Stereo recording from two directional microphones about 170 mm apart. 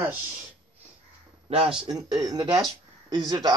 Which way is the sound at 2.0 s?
20° right (ahead or behind).